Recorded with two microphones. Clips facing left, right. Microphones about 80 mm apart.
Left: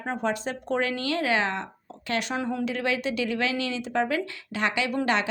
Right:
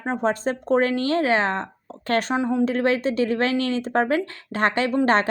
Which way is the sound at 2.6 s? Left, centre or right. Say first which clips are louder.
Right 6 dB; right.